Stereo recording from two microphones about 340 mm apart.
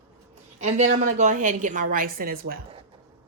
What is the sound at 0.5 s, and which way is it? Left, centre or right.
A woman's voice, centre.